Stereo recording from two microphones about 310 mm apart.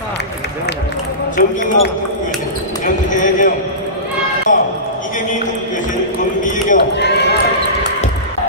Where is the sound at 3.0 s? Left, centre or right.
Left.